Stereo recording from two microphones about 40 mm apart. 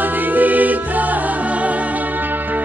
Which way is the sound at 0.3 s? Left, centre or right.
Right.